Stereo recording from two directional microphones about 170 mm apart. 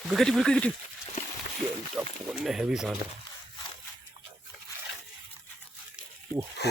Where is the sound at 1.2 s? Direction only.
45° left (ahead or behind).